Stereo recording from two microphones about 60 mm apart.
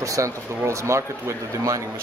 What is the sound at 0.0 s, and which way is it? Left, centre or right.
Speech, right.